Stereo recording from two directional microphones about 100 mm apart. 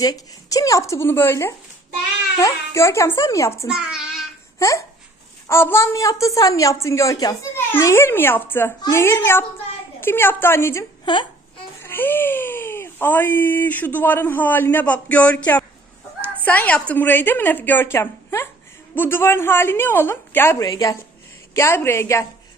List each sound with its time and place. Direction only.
0.0 s a woman's voice: 40° left (ahead or behind)
3.7 s a child's voice: 10° right (ahead or behind)
5.5 s a woman's voice: 25° left (ahead or behind)
11.0 s speech: 55° left (ahead or behind)
11.8 s speech: 20° left (ahead or behind)
20.6 s a woman's voice: 35° left (ahead or behind)
21.5 s speech: 25° left (ahead or behind)